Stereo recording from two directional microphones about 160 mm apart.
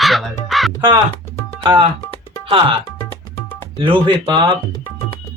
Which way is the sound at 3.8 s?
30° right (ahead or behind).